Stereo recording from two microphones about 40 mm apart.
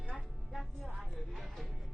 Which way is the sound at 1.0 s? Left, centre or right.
Centre.